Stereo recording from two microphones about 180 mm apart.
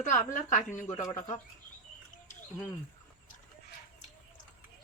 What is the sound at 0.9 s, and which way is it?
Speech, 20° left (ahead or behind).